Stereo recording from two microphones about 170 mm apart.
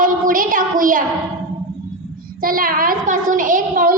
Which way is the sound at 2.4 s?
55° right (ahead or behind).